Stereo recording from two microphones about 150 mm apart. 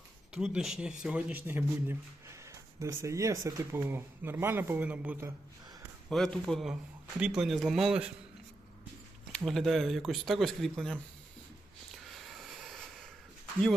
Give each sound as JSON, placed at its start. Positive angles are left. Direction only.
{"t": 0.3, "sound": "a man's voice", "side_deg": -5}
{"t": 6.1, "sound": "speech", "side_deg": 5}
{"t": 9.3, "sound": "speech", "side_deg": 0}
{"t": 12.0, "sound": "vehicle", "side_deg": 0}